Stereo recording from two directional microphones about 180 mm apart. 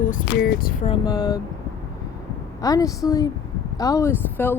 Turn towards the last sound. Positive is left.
turn(degrees=15)  # may be behind; listen again after turning